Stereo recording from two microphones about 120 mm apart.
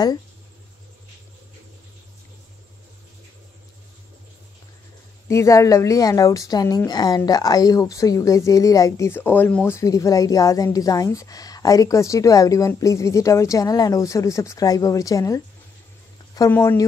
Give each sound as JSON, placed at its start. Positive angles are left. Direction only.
{"t": 5.3, "sound": "speech", "side_deg": 25}